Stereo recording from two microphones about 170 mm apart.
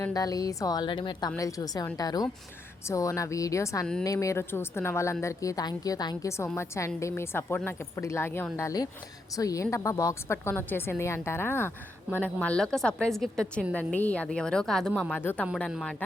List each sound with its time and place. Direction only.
0.0 s a woman's voice: 20° left (ahead or behind); by 16.0 s 5° left (ahead or behind)